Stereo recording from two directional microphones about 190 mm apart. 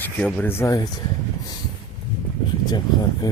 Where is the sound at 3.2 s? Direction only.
20° left (ahead or behind).